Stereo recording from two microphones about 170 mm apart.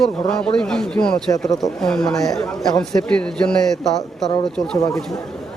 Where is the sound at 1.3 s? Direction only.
20° left (ahead or behind).